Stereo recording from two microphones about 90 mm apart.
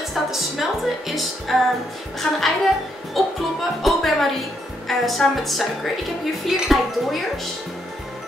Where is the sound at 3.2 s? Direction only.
Centre (ahead or behind).